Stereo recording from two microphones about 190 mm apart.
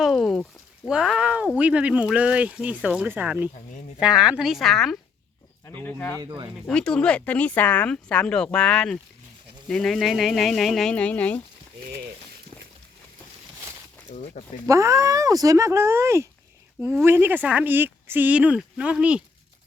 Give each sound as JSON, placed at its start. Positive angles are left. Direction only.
{"t": 0.0, "sound": "a sound", "side_deg": 0}
{"t": 0.9, "sound": "speech", "side_deg": -5}
{"t": 6.1, "sound": "speech", "side_deg": -20}
{"t": 6.7, "sound": "speech", "side_deg": 5}
{"t": 14.1, "sound": "speech", "side_deg": 35}
{"t": 14.7, "sound": "speech", "side_deg": -15}